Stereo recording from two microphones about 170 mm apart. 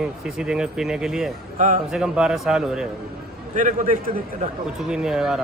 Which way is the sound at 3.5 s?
50° right (ahead or behind).